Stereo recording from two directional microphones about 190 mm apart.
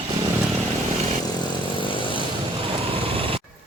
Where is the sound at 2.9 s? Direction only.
30° right (ahead or behind).